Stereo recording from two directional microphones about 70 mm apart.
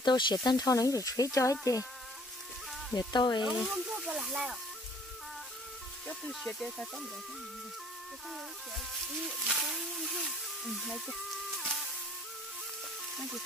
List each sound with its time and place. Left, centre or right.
0.0 s speech: left
0.7 s speech: left
3.0 s speech: left
3.4 s speech: centre
6.0 s speech: centre
9.5 s speech: centre